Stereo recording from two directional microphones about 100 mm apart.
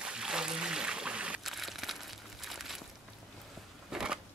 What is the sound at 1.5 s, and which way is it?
Crumpling, centre (ahead or behind).